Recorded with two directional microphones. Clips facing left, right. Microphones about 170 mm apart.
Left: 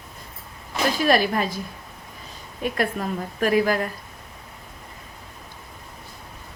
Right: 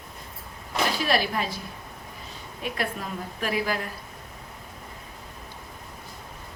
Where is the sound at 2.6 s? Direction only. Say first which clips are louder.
Left 6 dB; 45° left (ahead or behind).